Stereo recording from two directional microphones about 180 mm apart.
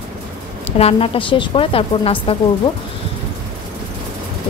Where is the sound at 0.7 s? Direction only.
35° left (ahead or behind).